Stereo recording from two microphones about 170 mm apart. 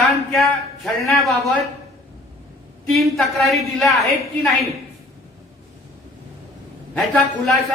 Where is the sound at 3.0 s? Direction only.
Centre (ahead or behind).